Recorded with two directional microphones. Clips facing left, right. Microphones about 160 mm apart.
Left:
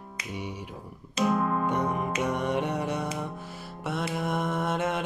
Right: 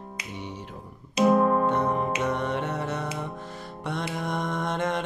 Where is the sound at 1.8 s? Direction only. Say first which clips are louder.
Right 3 dB; 30° right (ahead or behind).